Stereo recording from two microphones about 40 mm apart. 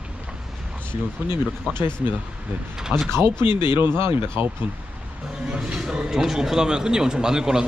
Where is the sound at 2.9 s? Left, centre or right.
Right.